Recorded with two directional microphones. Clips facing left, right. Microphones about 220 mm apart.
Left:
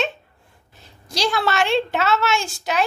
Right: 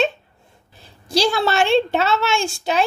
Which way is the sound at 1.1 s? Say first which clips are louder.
Right 4 dB; 30° right (ahead or behind).